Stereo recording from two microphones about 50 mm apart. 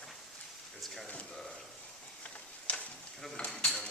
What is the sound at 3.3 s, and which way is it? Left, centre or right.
Dishes, left.